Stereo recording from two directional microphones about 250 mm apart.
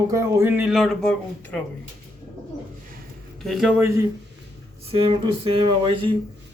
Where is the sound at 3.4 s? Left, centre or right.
Centre.